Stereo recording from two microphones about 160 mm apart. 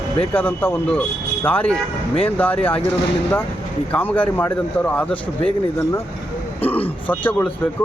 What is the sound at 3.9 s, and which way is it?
Speech, 10° left (ahead or behind).